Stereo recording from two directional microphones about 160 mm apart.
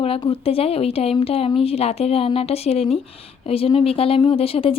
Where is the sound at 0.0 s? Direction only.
35° left (ahead or behind).